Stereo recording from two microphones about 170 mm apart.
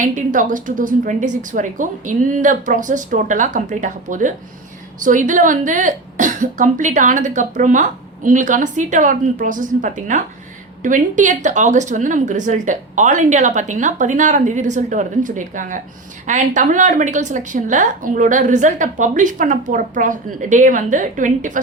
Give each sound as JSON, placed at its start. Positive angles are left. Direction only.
{"t": 0.0, "sound": "a woman's voice", "side_deg": -50}